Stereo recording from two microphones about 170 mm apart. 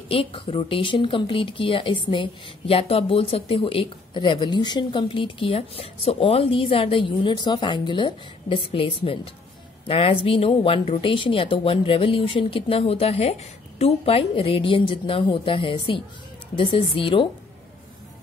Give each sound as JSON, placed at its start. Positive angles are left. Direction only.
{"t": 0.1, "sound": "a woman's voice", "side_deg": 35}